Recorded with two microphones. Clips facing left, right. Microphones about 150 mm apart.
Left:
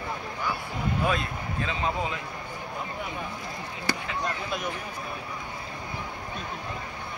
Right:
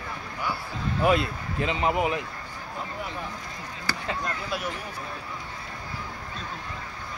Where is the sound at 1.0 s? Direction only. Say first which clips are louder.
Right 8 dB; 20° right (ahead or behind).